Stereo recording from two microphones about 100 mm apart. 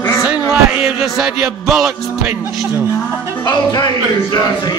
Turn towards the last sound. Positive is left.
turn(degrees=45)  # may be behind; listen again after turning